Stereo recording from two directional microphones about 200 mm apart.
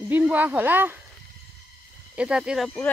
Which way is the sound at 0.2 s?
10° right (ahead or behind).